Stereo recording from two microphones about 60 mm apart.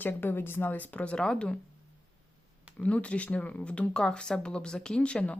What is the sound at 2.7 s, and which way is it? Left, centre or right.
Speech, left.